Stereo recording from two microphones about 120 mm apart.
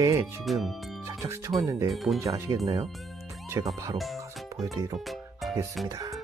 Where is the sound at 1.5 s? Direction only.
35° right (ahead or behind).